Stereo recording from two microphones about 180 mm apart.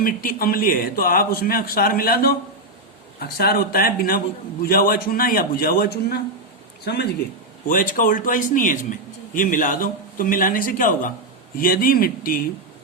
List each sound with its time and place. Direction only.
0.0 s a man's voice: 50° left (ahead or behind)
7.7 s a man's voice: 50° left (ahead or behind)